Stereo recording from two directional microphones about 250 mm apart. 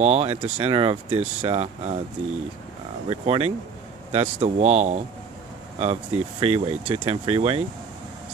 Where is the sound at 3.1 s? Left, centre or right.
Right.